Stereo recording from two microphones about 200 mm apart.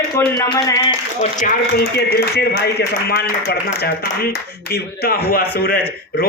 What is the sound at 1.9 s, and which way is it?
Speech, 55° left (ahead or behind).